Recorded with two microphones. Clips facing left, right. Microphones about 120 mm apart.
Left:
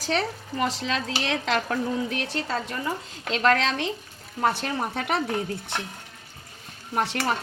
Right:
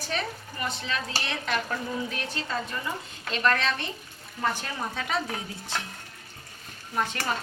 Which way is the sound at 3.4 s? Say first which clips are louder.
Left 4 dB; 90° left.